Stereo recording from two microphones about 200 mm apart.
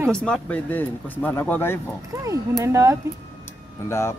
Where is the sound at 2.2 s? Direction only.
15° right (ahead or behind).